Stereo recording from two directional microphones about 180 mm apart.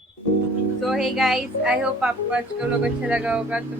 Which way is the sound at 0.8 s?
Centre (ahead or behind).